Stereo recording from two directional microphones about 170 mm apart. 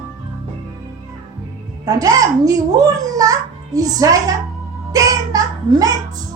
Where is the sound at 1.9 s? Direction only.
20° right (ahead or behind).